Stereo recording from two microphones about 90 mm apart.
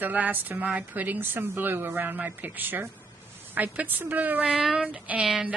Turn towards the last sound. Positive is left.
turn(degrees=-10)  # may be behind; listen again after turning